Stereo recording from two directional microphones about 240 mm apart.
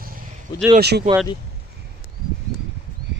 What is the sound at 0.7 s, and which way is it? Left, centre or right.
Speech, right.